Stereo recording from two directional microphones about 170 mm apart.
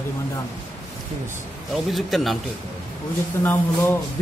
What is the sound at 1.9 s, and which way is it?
Speech, centre (ahead or behind).